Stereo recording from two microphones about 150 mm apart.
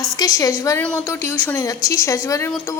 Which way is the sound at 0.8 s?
10° left (ahead or behind).